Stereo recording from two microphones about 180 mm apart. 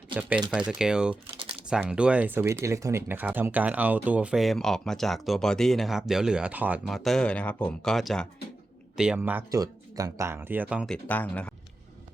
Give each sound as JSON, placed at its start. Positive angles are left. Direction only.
{"t": 0.1, "sound": "speech", "side_deg": -10}
{"t": 1.1, "sound": "typing", "side_deg": -30}
{"t": 1.6, "sound": "speech", "side_deg": -5}
{"t": 10.9, "sound": "speech", "side_deg": 10}